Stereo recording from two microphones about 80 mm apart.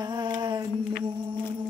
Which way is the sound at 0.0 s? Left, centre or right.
Right.